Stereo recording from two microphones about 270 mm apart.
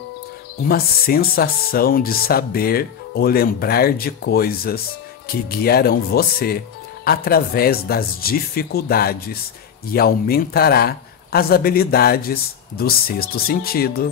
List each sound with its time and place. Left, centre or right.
0.7 s speech: left